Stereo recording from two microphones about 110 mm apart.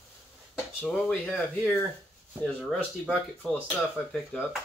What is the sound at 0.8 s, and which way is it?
Cutlery, 15° left (ahead or behind).